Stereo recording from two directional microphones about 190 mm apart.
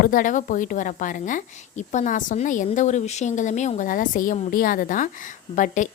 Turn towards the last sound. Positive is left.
turn(degrees=45)  # may be behind; listen again after turning